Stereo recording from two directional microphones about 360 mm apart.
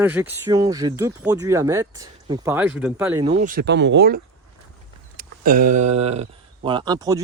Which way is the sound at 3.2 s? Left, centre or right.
Centre.